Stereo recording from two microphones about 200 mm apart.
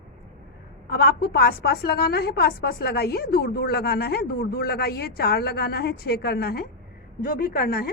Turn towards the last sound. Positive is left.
turn(degrees=50)  # may be behind; listen again after turning